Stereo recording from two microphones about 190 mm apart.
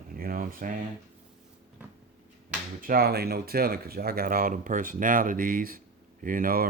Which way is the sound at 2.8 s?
50° right (ahead or behind).